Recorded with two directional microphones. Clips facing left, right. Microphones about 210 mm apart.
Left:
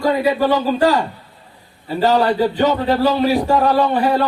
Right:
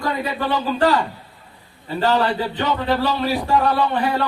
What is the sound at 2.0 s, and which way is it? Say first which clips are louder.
Speech: left 5 dB; 40° left (ahead or behind).